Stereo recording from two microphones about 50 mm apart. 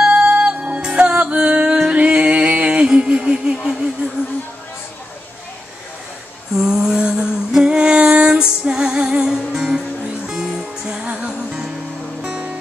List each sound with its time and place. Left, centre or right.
0.0 s music: centre
6.5 s humming: centre
10.3 s music: centre